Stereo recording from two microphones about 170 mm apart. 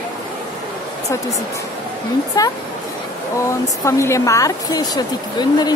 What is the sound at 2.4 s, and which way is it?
Speech, 20° left (ahead or behind).